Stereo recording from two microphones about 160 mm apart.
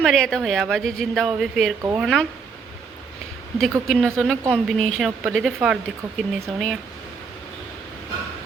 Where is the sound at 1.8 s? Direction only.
15° right (ahead or behind).